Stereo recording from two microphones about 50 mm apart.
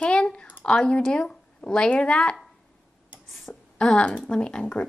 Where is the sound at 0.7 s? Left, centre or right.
Left.